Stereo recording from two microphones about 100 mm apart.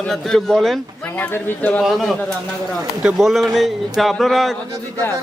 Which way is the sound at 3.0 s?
10° right (ahead or behind).